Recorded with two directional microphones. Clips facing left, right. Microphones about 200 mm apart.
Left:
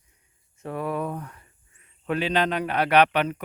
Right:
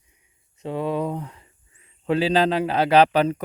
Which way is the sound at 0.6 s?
20° right (ahead or behind).